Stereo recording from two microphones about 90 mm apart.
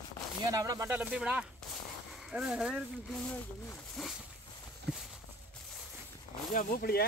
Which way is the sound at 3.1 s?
15° left (ahead or behind).